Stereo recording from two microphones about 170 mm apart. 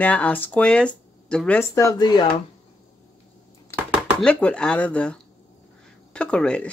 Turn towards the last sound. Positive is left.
turn(degrees=5)  # may be behind; listen again after turning